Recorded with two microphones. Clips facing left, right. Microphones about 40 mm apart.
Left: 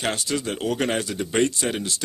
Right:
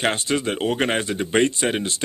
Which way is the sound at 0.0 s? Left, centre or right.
Right.